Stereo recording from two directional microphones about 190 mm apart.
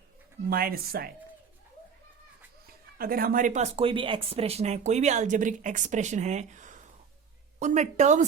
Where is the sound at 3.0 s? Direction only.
50° right (ahead or behind).